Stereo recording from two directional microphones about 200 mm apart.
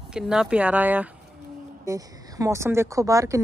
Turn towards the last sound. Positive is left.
turn(degrees=-15)  # may be behind; listen again after turning